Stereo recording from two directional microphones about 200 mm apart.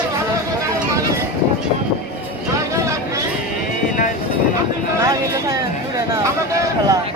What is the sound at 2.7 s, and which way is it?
Vehicle, 15° right (ahead or behind).